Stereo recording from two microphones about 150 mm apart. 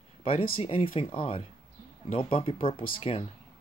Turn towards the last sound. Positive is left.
turn(degrees=40)  # may be behind; listen again after turning